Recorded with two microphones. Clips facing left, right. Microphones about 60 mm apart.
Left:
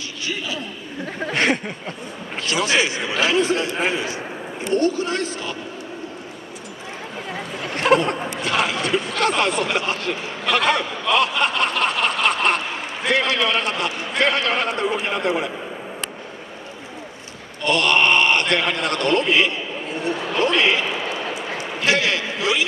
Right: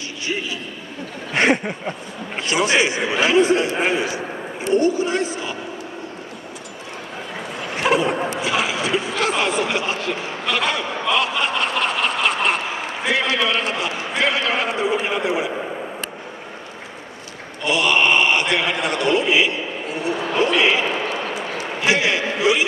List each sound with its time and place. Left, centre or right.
1.3 s a man's voice: centre
7.7 s a sound: centre
8.4 s speech: centre
17.6 s a man's voice: centre
21.8 s a man's voice: centre